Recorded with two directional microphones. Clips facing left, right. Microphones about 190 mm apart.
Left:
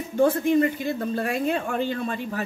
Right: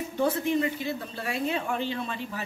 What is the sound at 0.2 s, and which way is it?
A woman's voice, 50° left (ahead or behind).